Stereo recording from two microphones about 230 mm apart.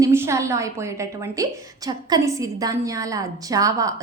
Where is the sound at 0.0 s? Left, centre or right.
Centre.